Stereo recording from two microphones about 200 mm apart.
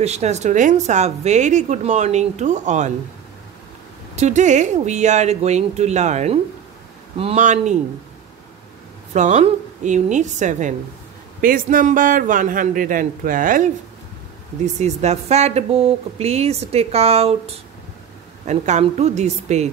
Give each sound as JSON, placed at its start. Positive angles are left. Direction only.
{"t": 0.0, "sound": "a woman's voice", "side_deg": -35}
{"t": 4.1, "sound": "a woman's voice", "side_deg": -35}
{"t": 9.1, "sound": "a woman's voice", "side_deg": -35}
{"t": 18.5, "sound": "a woman's voice", "side_deg": -35}